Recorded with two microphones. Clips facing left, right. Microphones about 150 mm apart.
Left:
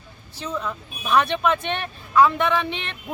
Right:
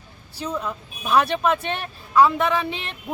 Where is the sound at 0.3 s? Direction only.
10° right (ahead or behind).